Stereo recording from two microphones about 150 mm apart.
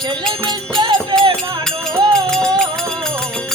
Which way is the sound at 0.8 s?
30° right (ahead or behind).